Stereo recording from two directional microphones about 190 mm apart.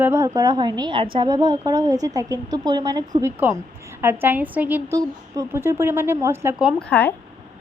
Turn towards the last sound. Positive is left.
turn(degrees=5)  # may be behind; listen again after turning